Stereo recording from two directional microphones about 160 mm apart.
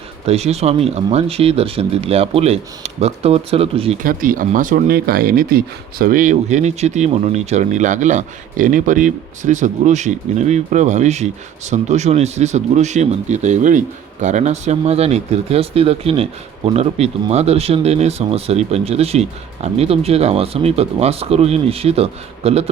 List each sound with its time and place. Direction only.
0.3 s speech: 40° right (ahead or behind)
4.0 s speech: 60° right (ahead or behind); by 22.7 s 40° right (ahead or behind)